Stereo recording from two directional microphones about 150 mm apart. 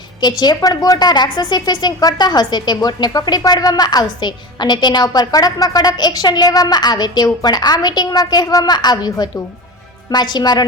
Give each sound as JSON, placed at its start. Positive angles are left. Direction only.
{"t": 0.2, "sound": "a woman's voice", "side_deg": 30}